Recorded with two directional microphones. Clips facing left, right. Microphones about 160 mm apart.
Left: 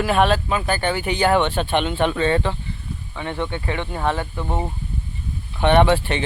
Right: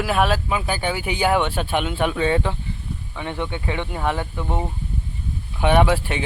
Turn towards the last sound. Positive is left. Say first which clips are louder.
# left 2 dB
turn(degrees=-5)  # may be behind; listen again after turning